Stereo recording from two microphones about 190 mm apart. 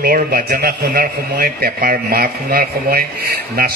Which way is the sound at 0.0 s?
50° right (ahead or behind).